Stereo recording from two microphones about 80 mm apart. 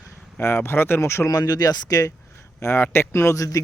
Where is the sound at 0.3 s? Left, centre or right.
Left.